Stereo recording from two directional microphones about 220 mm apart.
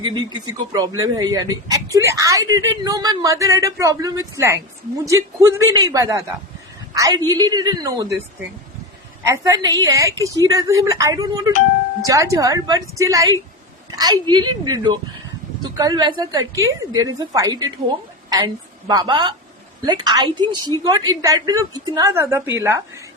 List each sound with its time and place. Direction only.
0.0 s a woman's voice: 20° right (ahead or behind)